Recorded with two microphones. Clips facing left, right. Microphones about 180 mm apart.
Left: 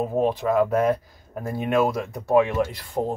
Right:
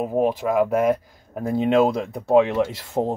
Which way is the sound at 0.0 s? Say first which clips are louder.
Right 1 dB; 10° right (ahead or behind).